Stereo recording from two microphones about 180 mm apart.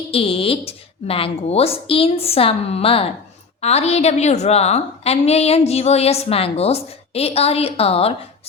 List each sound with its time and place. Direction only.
0.1 s a woman's voice: 30° left (ahead or behind)